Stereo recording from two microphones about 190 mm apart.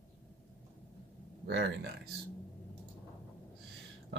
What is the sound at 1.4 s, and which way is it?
Speech, 65° right (ahead or behind).